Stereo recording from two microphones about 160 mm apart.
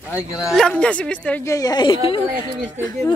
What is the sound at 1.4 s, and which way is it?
Speech, 20° left (ahead or behind).